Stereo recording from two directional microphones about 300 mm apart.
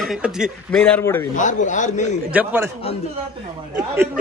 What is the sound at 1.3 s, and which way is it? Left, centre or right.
Speech, left.